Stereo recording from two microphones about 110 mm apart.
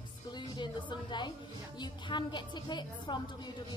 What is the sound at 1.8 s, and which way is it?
Speech, 45° left (ahead or behind).